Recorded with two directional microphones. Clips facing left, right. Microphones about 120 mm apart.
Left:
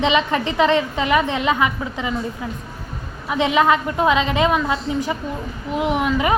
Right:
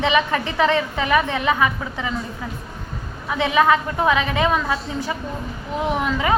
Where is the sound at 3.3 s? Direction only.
20° left (ahead or behind).